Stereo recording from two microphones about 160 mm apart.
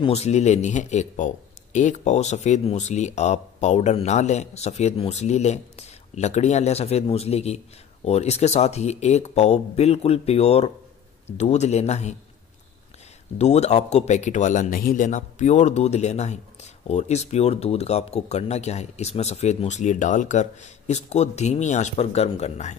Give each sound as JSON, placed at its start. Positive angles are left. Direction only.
{"t": 0.0, "sound": "speech", "side_deg": 40}
{"t": 13.4, "sound": "speech", "side_deg": 45}